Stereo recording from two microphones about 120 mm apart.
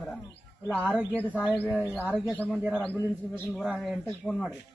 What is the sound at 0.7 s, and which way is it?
Speech, 10° left (ahead or behind).